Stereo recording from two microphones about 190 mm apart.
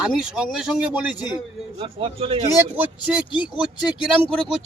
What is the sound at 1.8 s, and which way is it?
Speech, 30° right (ahead or behind).